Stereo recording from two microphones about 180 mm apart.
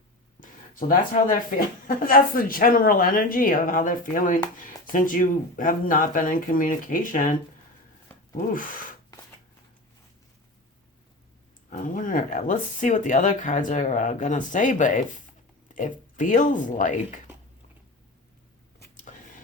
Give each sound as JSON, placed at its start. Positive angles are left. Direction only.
{"t": 0.3, "sound": "speech", "side_deg": 50}
{"t": 11.7, "sound": "speech", "side_deg": 50}